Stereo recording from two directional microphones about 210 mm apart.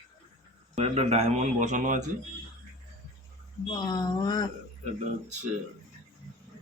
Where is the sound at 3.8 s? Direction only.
20° left (ahead or behind).